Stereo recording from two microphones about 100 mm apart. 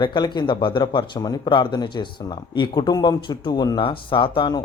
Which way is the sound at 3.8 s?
55° left (ahead or behind).